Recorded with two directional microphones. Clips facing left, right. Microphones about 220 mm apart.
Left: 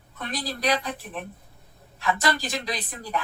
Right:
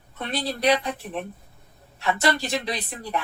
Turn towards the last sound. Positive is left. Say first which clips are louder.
# right 1 dB
turn(degrees=-30)  # may be behind; listen again after turning